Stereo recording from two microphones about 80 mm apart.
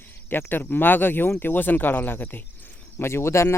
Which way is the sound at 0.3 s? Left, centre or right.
Left.